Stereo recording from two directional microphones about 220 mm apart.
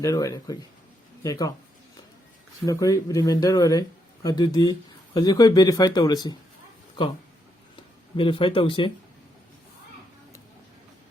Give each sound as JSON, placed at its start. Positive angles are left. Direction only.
{"t": 0.0, "sound": "speech", "side_deg": 15}
{"t": 2.6, "sound": "speech", "side_deg": 15}
{"t": 8.1, "sound": "speech", "side_deg": 25}